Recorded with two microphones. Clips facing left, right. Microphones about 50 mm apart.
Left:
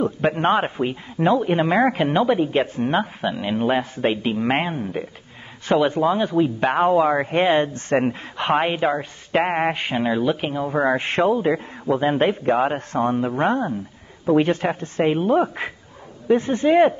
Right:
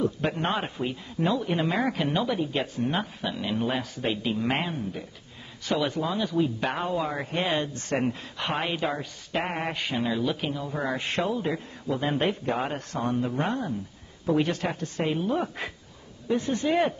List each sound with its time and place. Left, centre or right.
0.0 s speech: left
6.8 s speech: left